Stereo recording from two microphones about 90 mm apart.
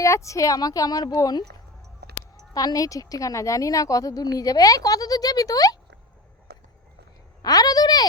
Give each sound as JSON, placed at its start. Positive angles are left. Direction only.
{"t": 0.0, "sound": "a woman's voice", "side_deg": 35}
{"t": 2.5, "sound": "a woman's voice", "side_deg": 45}
{"t": 7.4, "sound": "a sound", "side_deg": 45}